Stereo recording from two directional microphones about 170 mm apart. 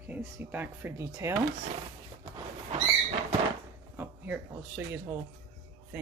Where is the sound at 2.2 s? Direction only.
35° right (ahead or behind).